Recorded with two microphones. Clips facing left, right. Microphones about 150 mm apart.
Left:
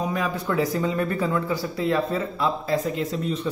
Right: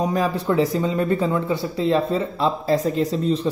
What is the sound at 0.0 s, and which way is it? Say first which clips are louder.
Speech: right 5 dB; 35° right (ahead or behind).